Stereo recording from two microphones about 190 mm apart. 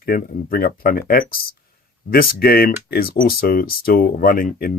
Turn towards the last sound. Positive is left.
turn(degrees=50)  # may be behind; listen again after turning